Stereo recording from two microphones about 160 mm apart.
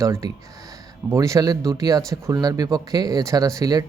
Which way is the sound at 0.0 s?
20° right (ahead or behind).